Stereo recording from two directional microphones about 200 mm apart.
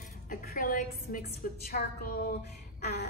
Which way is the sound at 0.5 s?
45° left (ahead or behind).